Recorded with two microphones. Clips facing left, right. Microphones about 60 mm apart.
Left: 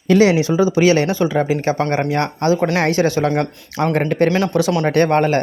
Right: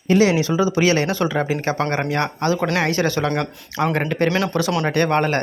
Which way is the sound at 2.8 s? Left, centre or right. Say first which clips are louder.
Left 4 dB; left.